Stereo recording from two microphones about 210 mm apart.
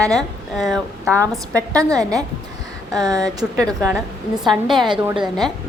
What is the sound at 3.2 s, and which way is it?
A woman's voice, 5° left (ahead or behind).